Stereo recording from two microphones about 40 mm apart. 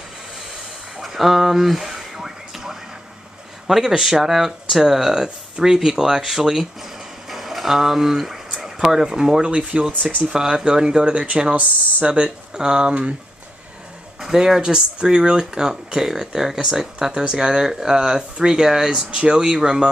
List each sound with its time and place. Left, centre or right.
1.0 s a sound: centre
3.6 s speech: centre
9.5 s speech: right
14.2 s speech: centre
19.0 s speech: right